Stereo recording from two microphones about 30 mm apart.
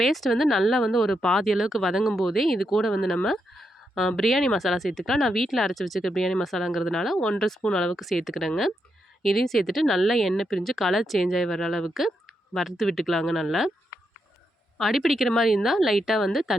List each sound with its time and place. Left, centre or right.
0.0 s a woman's voice: centre
1.5 s speech: centre
2.1 s speech: centre
3.6 s a sound: centre
4.2 s a woman's voice: centre
7.9 s a woman's voice: centre
9.3 s a woman's voice: centre
10.4 s speech: centre
10.8 s a woman's voice: centre
14.8 s a woman's voice: centre